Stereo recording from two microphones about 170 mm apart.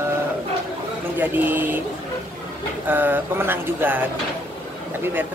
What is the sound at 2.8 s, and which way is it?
Speech, 10° right (ahead or behind).